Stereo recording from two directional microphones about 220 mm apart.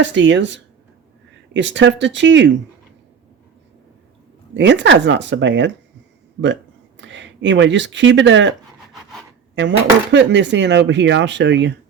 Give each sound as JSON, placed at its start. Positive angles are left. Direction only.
{"t": 0.0, "sound": "speech", "side_deg": -55}
{"t": 4.5, "sound": "speech", "side_deg": -55}
{"t": 9.6, "sound": "speech", "side_deg": -55}